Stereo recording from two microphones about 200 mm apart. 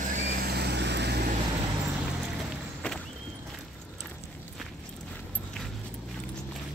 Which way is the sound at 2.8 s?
5° left (ahead or behind).